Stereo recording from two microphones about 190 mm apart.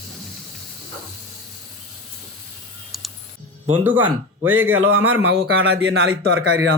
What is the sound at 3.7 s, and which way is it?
Speech, 10° right (ahead or behind).